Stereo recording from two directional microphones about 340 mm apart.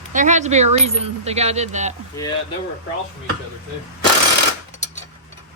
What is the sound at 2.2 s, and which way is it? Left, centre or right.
Speech, centre.